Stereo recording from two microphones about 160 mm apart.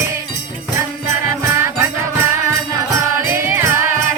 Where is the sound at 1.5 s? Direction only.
15° right (ahead or behind).